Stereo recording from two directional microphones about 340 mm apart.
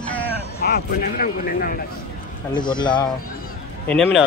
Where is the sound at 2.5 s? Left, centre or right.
Centre.